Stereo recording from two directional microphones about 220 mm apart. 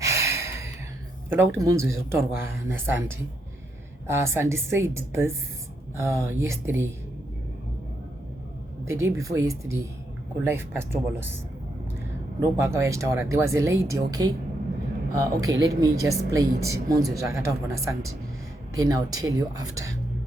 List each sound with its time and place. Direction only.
0.0 s a sound: 15° right (ahead or behind)
1.3 s a woman's voice: 10° right (ahead or behind)
4.0 s a woman's voice: 10° right (ahead or behind)
8.8 s a woman's voice: 10° right (ahead or behind)
12.4 s a woman's voice: 15° right (ahead or behind)